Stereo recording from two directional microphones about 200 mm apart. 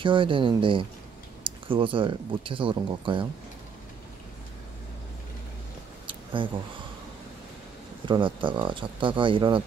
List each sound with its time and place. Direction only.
0.0 s speech: 25° right (ahead or behind)
6.0 s a sound: 25° right (ahead or behind)
8.0 s speech: 25° right (ahead or behind)